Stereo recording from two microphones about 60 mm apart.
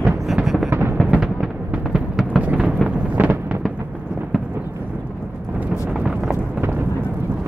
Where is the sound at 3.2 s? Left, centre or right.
Right.